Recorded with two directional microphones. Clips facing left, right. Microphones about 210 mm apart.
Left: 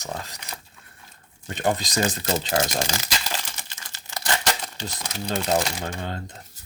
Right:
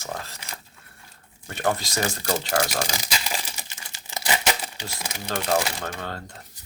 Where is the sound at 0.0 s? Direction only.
20° left (ahead or behind).